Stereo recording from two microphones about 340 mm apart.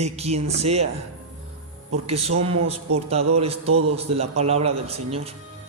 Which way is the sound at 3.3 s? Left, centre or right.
Centre.